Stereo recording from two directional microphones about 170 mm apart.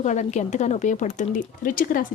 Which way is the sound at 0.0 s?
45° left (ahead or behind).